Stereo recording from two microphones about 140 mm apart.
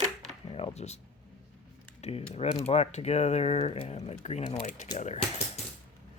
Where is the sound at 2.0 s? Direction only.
45° left (ahead or behind).